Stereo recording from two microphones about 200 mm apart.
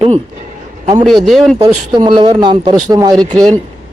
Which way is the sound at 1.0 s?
Centre (ahead or behind).